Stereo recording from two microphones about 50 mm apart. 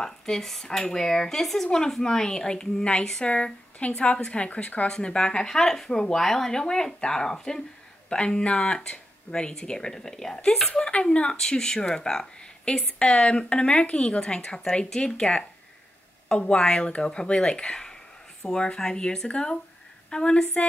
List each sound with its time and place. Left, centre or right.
0.0 s stir: centre
0.7 s speech: centre
10.7 s speech: left